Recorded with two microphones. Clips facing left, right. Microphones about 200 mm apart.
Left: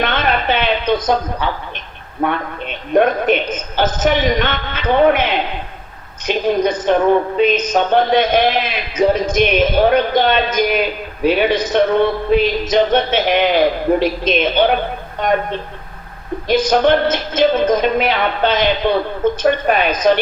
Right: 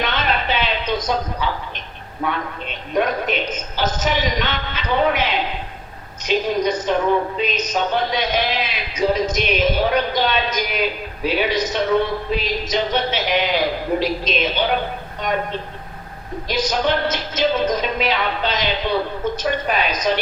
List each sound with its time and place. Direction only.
0.0 s a sound: 50° left (ahead or behind)
2.2 s a woman's voice: 55° left (ahead or behind)
16.5 s a woman's voice: 55° left (ahead or behind)